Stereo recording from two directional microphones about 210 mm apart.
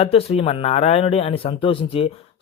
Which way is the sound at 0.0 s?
30° left (ahead or behind).